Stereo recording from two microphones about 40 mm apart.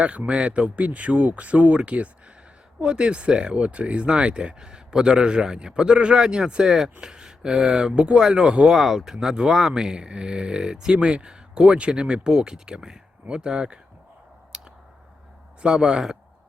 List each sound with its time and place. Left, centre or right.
0.0 s speech: right
8.7 s speech: centre
14.5 s a sound: right
15.6 s speech: centre